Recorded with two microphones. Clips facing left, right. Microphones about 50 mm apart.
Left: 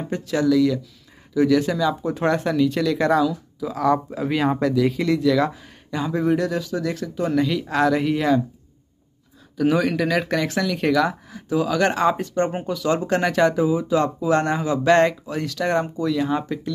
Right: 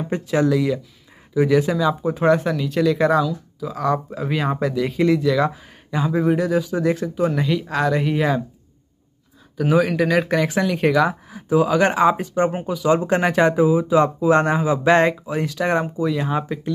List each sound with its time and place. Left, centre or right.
0.0 s speech: right
6.7 s speech: right
7.2 s speech: centre
9.6 s speech: centre